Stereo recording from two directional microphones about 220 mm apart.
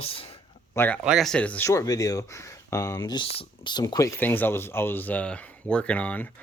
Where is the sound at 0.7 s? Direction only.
10° left (ahead or behind).